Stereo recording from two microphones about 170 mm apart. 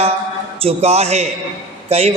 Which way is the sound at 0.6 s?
35° right (ahead or behind).